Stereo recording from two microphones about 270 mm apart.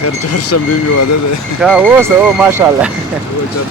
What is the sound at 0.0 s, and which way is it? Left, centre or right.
Speech, left.